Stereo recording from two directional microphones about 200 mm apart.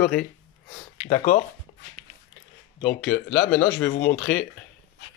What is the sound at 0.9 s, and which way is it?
Speech, 35° left (ahead or behind).